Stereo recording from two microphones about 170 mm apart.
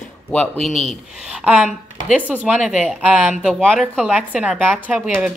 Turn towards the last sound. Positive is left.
turn(degrees=-5)  # may be behind; listen again after turning